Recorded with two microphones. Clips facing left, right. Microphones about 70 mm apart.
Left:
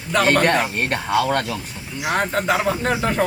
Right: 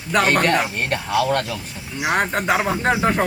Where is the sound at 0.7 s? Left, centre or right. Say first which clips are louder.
Left 1 dB; left.